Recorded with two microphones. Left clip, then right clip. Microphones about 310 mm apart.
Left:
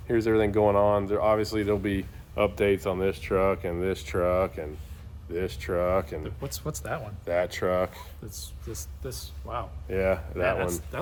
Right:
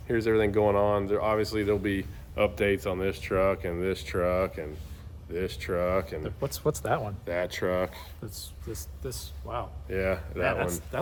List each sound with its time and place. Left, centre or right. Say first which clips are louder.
0.1 s speech: left 1 dB; centre
6.2 s speech: right 6 dB; centre
7.3 s speech: left 4 dB; centre
10.4 s speech: left 1 dB; centre